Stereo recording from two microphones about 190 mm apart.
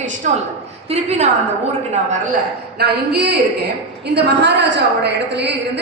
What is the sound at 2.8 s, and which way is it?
A woman's voice, 60° right (ahead or behind).